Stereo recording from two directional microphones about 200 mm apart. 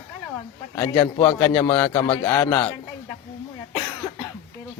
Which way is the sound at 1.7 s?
10° left (ahead or behind).